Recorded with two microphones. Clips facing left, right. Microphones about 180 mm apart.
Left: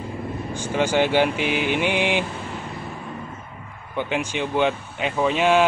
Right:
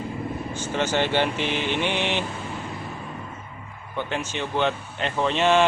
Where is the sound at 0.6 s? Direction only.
10° left (ahead or behind).